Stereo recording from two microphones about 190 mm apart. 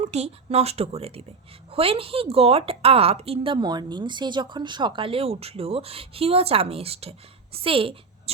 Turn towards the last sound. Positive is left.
turn(degrees=-30)  # may be behind; listen again after turning